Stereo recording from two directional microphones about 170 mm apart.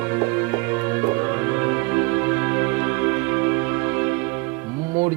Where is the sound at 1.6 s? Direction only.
15° right (ahead or behind).